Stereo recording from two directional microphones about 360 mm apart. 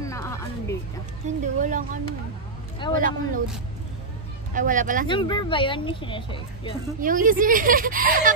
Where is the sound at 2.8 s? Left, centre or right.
Centre.